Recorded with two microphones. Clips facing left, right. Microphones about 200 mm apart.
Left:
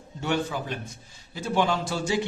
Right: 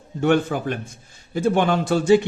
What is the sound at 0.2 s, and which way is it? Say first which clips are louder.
A man's voice: right 8 dB; 55° right (ahead or behind).